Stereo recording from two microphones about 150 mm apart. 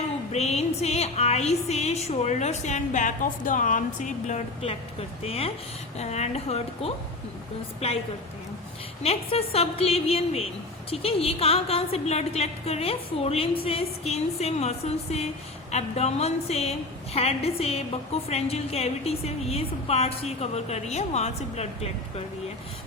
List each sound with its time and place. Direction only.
0.3 s music: 45° left (ahead or behind)
9.0 s a woman's voice: 40° left (ahead or behind)
10.9 s music: 40° left (ahead or behind)